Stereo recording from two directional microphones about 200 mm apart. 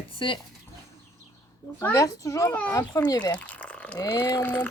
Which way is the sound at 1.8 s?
15° left (ahead or behind).